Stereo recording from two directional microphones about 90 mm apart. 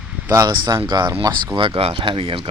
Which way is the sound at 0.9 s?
60° right (ahead or behind).